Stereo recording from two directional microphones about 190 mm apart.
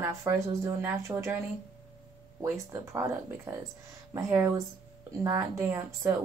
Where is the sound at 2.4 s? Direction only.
15° right (ahead or behind).